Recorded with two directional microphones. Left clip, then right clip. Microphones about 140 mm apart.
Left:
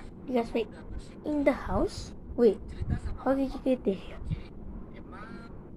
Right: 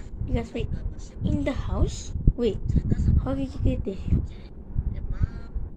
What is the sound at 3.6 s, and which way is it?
Speech, 5° left (ahead or behind).